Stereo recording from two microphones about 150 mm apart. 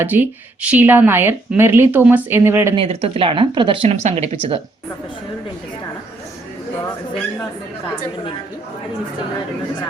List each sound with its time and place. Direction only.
0.0 s speech: 10° right (ahead or behind)
2.7 s speech: 40° right (ahead or behind)
3.8 s speech: 45° right (ahead or behind)